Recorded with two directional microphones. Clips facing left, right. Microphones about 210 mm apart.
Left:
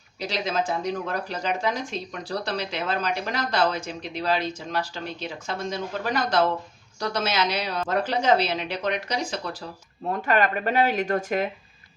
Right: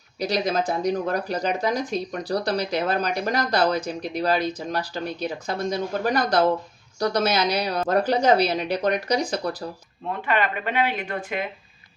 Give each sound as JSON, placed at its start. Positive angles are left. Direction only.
{"t": 0.2, "sound": "speech", "side_deg": -40}
{"t": 10.1, "sound": "speech", "side_deg": 45}